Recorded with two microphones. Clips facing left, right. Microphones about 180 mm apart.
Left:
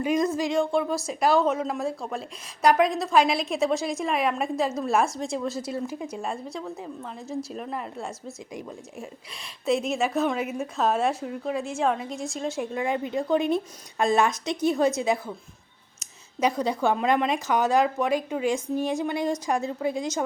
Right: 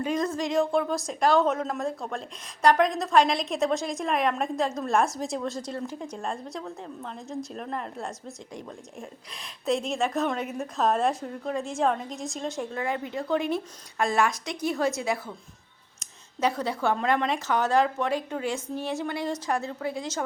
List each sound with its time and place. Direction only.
0.0 s a woman's voice: 10° left (ahead or behind)
12.7 s a woman's voice: 15° left (ahead or behind)
16.4 s speech: 15° left (ahead or behind)